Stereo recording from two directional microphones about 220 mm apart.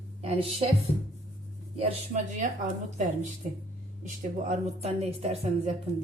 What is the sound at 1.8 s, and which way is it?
Speech, 35° right (ahead or behind).